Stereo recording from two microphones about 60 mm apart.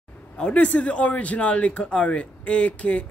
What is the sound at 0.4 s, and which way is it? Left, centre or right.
A man's voice, left.